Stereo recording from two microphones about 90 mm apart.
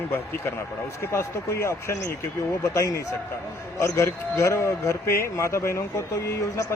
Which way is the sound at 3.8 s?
30° left (ahead or behind).